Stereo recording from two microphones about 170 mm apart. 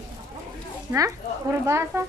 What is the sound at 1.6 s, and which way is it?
Speech, 15° right (ahead or behind).